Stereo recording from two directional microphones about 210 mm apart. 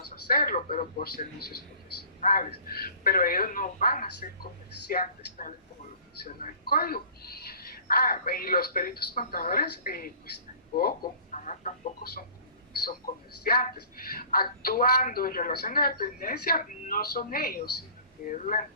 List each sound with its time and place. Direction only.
0.3 s a woman's voice: 45° left (ahead or behind)
2.2 s a woman's voice: 45° left (ahead or behind)
11.3 s chicken: 35° left (ahead or behind)
13.4 s a woman's voice: 45° left (ahead or behind)